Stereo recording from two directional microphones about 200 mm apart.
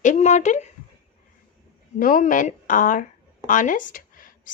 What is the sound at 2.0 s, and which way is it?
A woman's voice, 45° left (ahead or behind).